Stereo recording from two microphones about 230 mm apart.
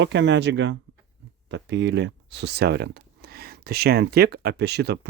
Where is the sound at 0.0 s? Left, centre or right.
Right.